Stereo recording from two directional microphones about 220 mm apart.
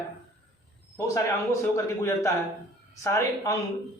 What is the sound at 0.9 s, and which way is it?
Speech, 15° left (ahead or behind).